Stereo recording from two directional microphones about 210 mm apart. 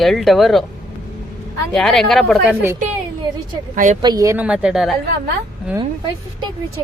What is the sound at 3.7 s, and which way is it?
Speech, 40° right (ahead or behind).